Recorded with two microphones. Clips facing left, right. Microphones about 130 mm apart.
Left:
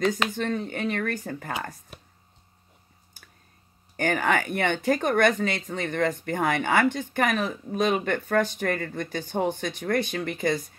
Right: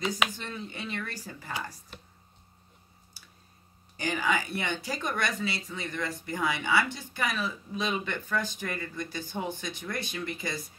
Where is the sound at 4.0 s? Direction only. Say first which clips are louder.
Left 5 dB; 60° left (ahead or behind).